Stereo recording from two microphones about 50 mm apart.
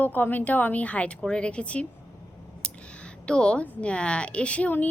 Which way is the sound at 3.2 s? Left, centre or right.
Centre.